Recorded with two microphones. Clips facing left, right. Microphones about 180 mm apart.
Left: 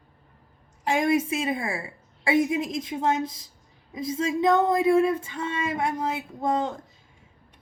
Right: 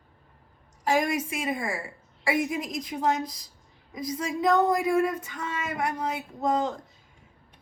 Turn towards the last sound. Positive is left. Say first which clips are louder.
# even
turn(degrees=25)  # may be behind; listen again after turning